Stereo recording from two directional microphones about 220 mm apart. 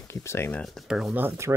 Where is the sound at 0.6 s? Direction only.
Centre (ahead or behind).